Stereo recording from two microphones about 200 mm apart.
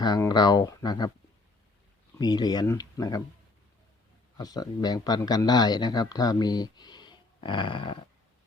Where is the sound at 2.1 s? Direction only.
20° left (ahead or behind).